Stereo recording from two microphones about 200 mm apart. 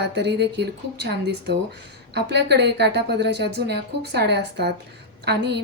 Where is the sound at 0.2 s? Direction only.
55° right (ahead or behind).